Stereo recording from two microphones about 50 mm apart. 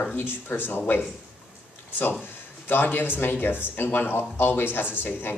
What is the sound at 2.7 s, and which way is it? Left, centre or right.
Speech, left.